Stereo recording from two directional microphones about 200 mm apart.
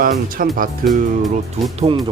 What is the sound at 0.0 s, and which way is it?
Speech, 45° right (ahead or behind).